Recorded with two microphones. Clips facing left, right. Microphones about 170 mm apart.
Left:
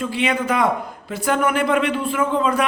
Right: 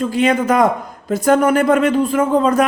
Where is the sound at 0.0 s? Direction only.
40° right (ahead or behind).